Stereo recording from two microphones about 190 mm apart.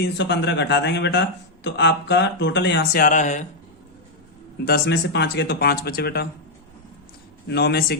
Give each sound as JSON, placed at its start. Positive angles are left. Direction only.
{"t": 0.0, "sound": "a man's voice", "side_deg": 65}
{"t": 4.6, "sound": "speech", "side_deg": 55}
{"t": 7.4, "sound": "speech", "side_deg": 60}